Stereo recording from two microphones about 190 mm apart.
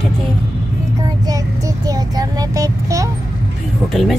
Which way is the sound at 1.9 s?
20° right (ahead or behind).